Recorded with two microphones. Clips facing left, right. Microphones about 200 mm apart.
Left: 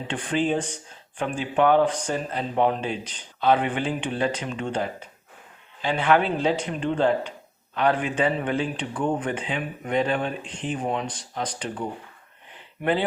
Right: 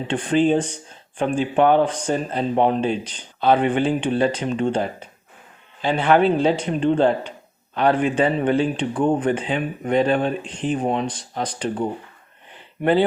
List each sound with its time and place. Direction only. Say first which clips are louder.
0.1 s speech: right 6 dB; 30° right (ahead or behind)
12.8 s speech: right 6 dB; 35° right (ahead or behind)